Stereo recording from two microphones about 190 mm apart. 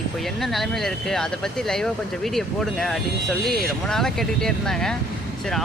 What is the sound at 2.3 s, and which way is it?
Speech, centre (ahead or behind).